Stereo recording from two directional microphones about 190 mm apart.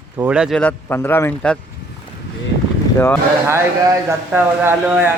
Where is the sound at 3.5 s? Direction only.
15° right (ahead or behind).